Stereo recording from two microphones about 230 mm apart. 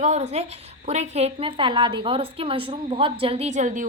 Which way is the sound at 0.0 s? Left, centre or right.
Right.